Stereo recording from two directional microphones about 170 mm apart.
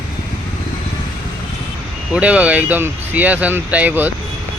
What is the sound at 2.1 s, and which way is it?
Speech, 5° right (ahead or behind).